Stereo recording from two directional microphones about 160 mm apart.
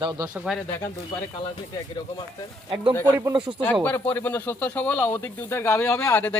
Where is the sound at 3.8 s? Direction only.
10° left (ahead or behind).